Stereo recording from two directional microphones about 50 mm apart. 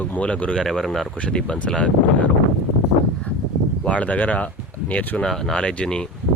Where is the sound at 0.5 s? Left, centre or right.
Centre.